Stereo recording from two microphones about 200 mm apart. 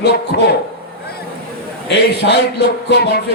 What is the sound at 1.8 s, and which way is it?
A man's voice, 55° left (ahead or behind).